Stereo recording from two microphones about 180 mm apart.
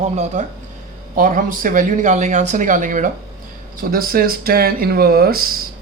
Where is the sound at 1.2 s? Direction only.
50° right (ahead or behind).